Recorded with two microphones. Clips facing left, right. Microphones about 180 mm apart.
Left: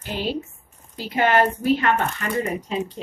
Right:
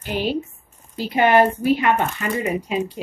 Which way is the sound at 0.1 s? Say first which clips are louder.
Right 3 dB; 15° right (ahead or behind).